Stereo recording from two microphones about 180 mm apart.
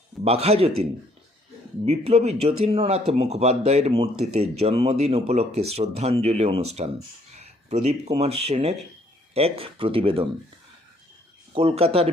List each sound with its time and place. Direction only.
0.3 s speech: 35° right (ahead or behind)
11.5 s speech: 30° right (ahead or behind)